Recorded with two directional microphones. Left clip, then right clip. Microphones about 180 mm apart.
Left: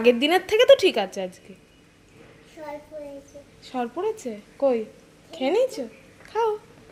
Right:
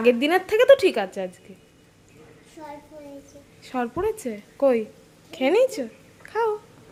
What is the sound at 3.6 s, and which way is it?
Speech, 15° right (ahead or behind).